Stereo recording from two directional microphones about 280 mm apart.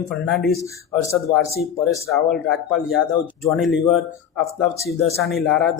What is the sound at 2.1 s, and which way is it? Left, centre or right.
Speech, centre.